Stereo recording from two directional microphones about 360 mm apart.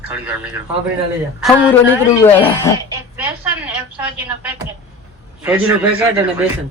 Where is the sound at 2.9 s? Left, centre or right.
Centre.